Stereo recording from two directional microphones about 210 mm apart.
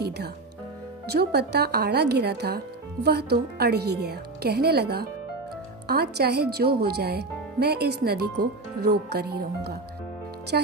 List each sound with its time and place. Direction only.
1.1 s speech: 50° right (ahead or behind)